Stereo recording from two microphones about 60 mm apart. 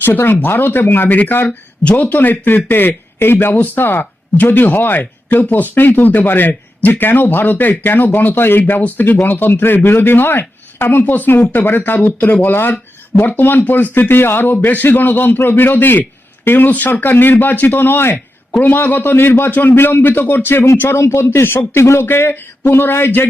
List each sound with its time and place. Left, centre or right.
0.0 s speech: left
1.5 s speech: left